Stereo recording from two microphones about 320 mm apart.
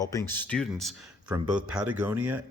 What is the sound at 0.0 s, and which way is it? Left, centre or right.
Speech, centre.